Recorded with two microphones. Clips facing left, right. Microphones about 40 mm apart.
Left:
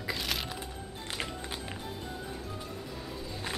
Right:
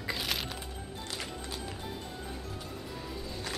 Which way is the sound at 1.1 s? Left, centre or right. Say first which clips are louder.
Left 4 dB; left.